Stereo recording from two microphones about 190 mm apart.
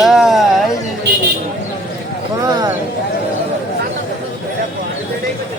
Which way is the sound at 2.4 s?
20° right (ahead or behind).